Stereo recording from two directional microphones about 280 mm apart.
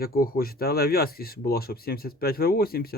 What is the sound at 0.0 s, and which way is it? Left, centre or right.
Speech, left.